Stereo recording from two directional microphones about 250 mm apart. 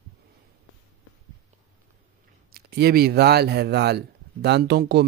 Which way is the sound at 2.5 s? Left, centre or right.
Right.